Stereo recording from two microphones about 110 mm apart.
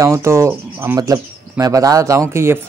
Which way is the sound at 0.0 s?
25° right (ahead or behind).